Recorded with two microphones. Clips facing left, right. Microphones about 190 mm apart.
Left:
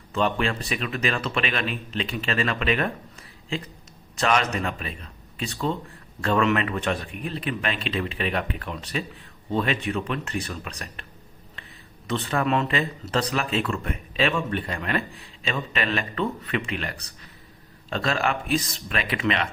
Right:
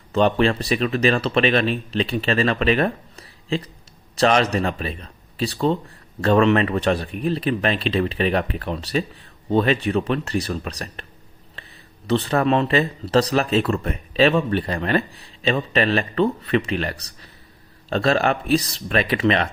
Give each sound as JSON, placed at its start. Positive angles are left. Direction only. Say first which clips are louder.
{"t": 0.1, "sound": "speech", "louder": "right 7 dB", "side_deg": -35}
{"t": 11.6, "sound": "a sound", "louder": "right 3 dB", "side_deg": -35}
{"t": 12.0, "sound": "speech", "louder": "right 6 dB", "side_deg": -35}